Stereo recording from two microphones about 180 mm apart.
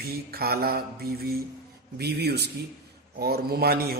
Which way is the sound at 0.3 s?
60° right (ahead or behind).